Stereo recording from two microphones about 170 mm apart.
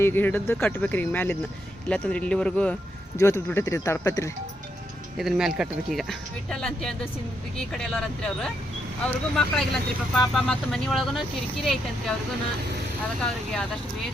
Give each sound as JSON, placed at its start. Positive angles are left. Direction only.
{"t": 0.0, "sound": "speech", "side_deg": 10}
{"t": 5.1, "sound": "speech", "side_deg": 0}